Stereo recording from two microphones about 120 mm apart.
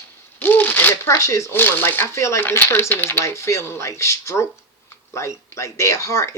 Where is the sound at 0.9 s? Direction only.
25° left (ahead or behind).